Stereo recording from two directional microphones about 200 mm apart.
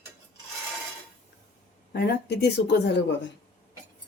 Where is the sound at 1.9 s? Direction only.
55° left (ahead or behind).